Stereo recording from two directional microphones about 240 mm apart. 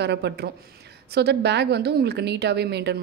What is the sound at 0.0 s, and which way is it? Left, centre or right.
A woman's voice, right.